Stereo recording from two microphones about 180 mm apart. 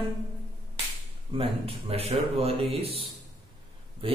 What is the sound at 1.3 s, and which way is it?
Speech, 35° right (ahead or behind).